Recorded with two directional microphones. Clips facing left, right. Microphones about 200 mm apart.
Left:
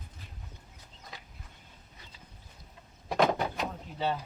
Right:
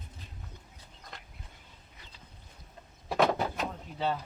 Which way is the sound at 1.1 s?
5° left (ahead or behind).